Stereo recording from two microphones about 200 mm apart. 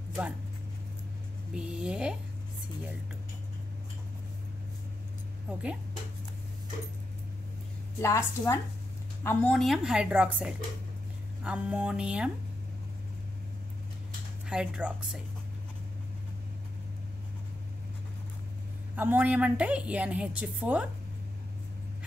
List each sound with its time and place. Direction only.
1.5 s a woman's voice: 5° right (ahead or behind)
5.5 s a woman's voice: 5° right (ahead or behind)
8.0 s a woman's voice: 15° left (ahead or behind); by 12.3 s 5° right (ahead or behind)
14.5 s a woman's voice: 5° right (ahead or behind)
18.9 s a woman's voice: 10° right (ahead or behind)